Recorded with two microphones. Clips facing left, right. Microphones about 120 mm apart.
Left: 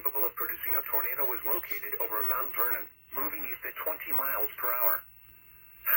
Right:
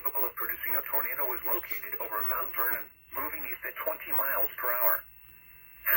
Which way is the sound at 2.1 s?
50° right (ahead or behind).